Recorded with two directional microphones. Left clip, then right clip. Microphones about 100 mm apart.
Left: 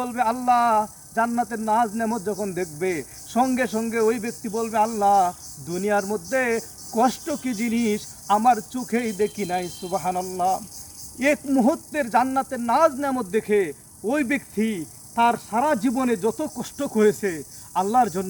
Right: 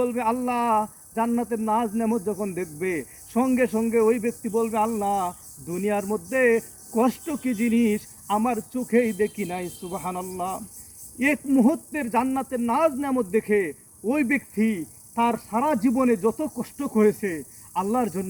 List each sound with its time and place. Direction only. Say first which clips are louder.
0.0 s speech: left 1 dB; 35° left (ahead or behind); by 18.3 s 15° left (ahead or behind)